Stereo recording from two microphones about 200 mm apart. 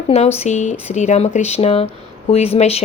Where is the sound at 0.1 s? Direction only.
30° left (ahead or behind).